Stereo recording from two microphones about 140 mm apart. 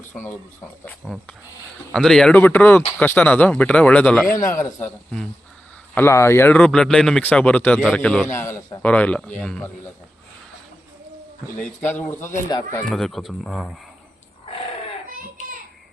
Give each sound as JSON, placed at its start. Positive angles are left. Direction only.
{"t": 0.1, "sound": "speech", "side_deg": 15}
{"t": 1.0, "sound": "speech", "side_deg": 0}
{"t": 4.4, "sound": "a man's voice", "side_deg": 20}
{"t": 5.9, "sound": "speech", "side_deg": 15}
{"t": 8.4, "sound": "a man's voice", "side_deg": 20}
{"t": 8.9, "sound": "speech", "side_deg": 10}
{"t": 11.5, "sound": "speech", "side_deg": 10}
{"t": 12.5, "sound": "a man's voice", "side_deg": 25}
{"t": 12.9, "sound": "speech", "side_deg": 0}